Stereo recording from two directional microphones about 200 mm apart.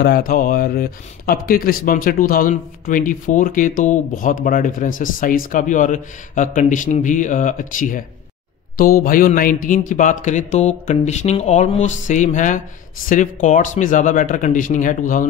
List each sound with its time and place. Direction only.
0.0 s speech: 45° left (ahead or behind)
9.0 s speech: 45° left (ahead or behind)